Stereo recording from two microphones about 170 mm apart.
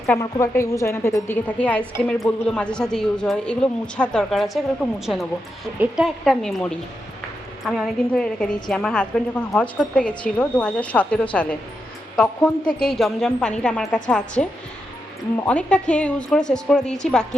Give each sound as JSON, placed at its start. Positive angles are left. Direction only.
{"t": 0.2, "sound": "a woman's voice", "side_deg": 15}
{"t": 15.4, "sound": "a woman's voice", "side_deg": 5}